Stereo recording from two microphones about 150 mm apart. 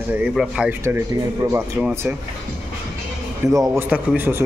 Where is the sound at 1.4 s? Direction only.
20° right (ahead or behind).